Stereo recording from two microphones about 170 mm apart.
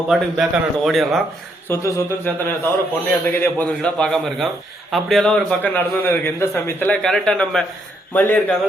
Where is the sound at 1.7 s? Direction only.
15° left (ahead or behind).